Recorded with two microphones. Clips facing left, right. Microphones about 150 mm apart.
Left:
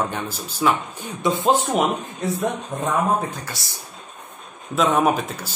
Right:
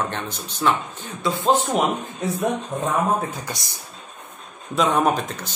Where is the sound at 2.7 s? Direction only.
10° right (ahead or behind).